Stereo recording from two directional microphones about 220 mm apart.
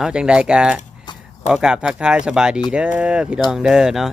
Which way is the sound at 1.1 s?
20° left (ahead or behind).